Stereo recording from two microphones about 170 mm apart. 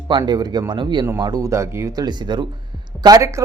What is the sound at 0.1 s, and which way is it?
Speech, 25° right (ahead or behind).